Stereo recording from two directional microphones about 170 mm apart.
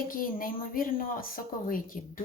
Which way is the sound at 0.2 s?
55° left (ahead or behind).